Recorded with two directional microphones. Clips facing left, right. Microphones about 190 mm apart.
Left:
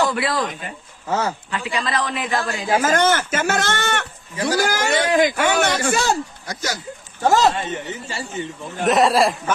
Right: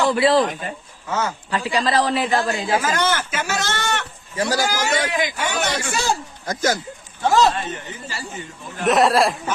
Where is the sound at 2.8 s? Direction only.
50° left (ahead or behind).